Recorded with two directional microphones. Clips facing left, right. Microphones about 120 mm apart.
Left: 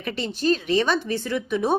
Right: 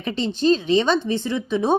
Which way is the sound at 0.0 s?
20° right (ahead or behind).